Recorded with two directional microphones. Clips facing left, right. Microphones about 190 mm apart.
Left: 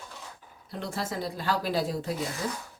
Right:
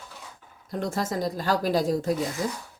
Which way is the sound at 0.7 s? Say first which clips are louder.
Right 5 dB; 45° right (ahead or behind).